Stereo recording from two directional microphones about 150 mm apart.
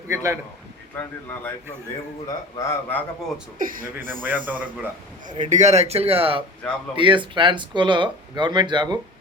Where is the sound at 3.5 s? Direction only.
65° right (ahead or behind).